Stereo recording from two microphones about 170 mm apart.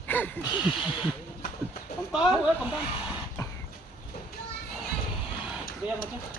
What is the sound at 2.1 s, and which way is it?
Speech, 5° right (ahead or behind).